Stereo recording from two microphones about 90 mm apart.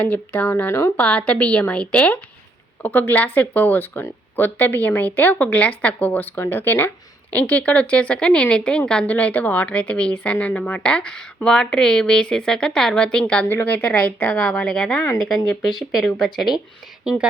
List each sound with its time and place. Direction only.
0.0 s a woman's voice: 15° left (ahead or behind)
13.5 s a woman's voice: 25° left (ahead or behind); by 16.6 s centre (ahead or behind)
17.0 s speech: 10° right (ahead or behind)